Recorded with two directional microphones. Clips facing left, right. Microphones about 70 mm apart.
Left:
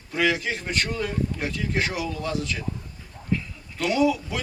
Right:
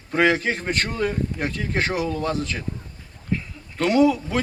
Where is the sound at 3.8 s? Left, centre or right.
Right.